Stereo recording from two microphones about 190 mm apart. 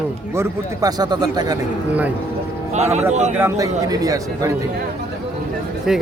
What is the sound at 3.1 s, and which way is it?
Speech, 35° right (ahead or behind).